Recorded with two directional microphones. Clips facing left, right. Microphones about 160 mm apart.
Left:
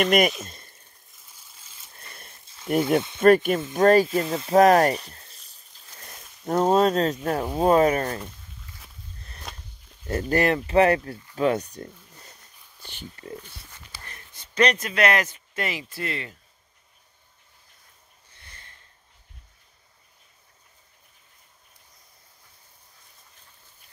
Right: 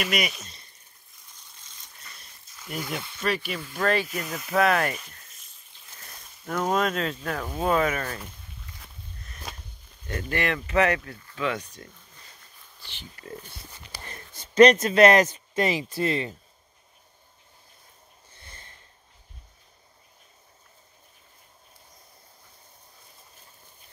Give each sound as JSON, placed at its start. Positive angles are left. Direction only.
{"t": 0.0, "sound": "speech", "side_deg": 50}
{"t": 0.4, "sound": "a sound", "side_deg": 50}
{"t": 1.1, "sound": "a sound", "side_deg": 5}
{"t": 2.7, "sound": "speech", "side_deg": 55}
{"t": 9.5, "sound": "walk", "side_deg": 0}
{"t": 10.0, "sound": "speech", "side_deg": 35}
{"t": 14.3, "sound": "speech", "side_deg": -40}